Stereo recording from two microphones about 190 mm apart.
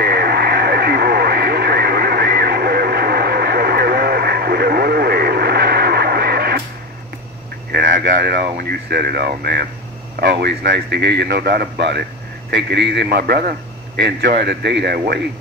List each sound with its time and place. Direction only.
0.0 s radio: 55° right (ahead or behind)
7.7 s a sound: 55° right (ahead or behind)
8.5 s a man's voice: 55° right (ahead or behind)